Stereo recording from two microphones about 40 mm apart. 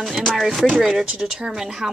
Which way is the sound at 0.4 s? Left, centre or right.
Centre.